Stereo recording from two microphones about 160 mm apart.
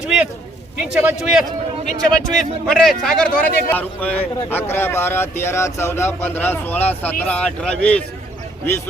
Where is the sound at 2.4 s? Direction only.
Centre (ahead or behind).